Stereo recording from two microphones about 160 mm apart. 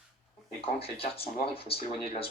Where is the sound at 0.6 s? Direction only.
35° left (ahead or behind).